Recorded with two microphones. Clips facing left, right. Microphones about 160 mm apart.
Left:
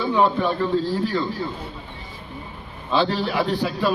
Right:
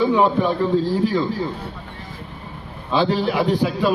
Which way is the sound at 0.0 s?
15° right (ahead or behind).